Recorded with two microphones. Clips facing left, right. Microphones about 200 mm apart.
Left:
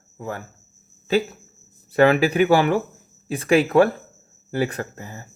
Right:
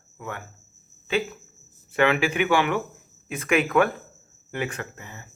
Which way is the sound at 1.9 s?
40° left (ahead or behind).